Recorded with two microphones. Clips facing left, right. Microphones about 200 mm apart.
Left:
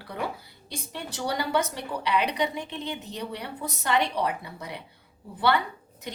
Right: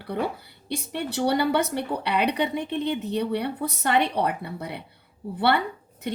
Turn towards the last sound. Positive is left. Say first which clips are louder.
# right 4 dB
turn(degrees=-60)  # may be behind; listen again after turning